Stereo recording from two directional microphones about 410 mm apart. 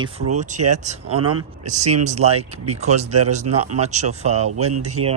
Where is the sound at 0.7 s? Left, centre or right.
Centre.